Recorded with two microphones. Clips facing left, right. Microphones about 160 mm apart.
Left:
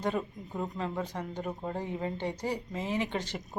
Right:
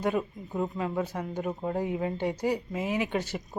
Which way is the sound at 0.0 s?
10° right (ahead or behind).